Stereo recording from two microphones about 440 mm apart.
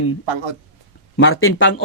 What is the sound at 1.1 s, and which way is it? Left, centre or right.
Speech, left.